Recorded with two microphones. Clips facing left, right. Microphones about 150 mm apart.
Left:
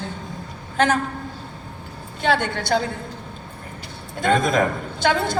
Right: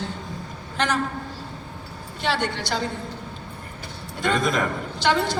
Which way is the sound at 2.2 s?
50° left (ahead or behind).